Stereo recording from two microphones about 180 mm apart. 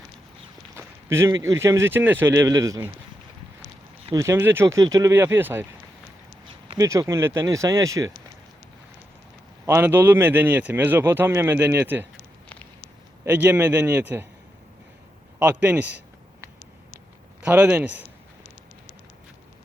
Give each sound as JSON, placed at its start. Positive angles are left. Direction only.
{"t": 0.8, "sound": "speech", "side_deg": -15}
{"t": 4.0, "sound": "speech", "side_deg": -20}
{"t": 6.5, "sound": "a sound", "side_deg": -30}
{"t": 6.8, "sound": "speech", "side_deg": -15}
{"t": 9.6, "sound": "speech", "side_deg": -10}
{"t": 13.2, "sound": "speech", "side_deg": -10}
{"t": 15.4, "sound": "speech", "side_deg": -10}
{"t": 17.4, "sound": "speech", "side_deg": -10}